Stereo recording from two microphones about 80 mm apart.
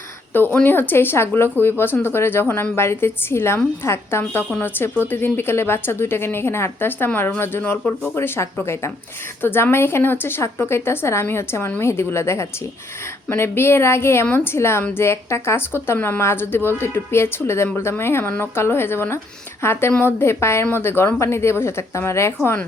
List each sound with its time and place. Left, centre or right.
0.3 s a woman's voice: left